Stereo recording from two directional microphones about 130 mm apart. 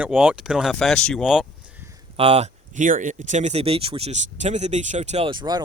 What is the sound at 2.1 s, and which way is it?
Speech, 50° right (ahead or behind).